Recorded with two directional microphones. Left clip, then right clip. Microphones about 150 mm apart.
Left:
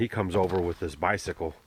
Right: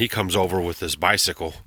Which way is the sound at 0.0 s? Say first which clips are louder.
Right 5 dB; 30° right (ahead or behind).